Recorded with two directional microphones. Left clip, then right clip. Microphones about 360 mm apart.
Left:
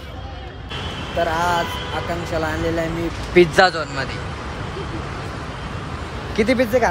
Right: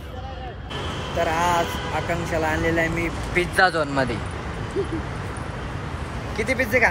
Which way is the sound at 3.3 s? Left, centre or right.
Centre.